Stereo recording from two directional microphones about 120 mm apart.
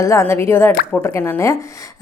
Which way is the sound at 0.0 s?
25° left (ahead or behind).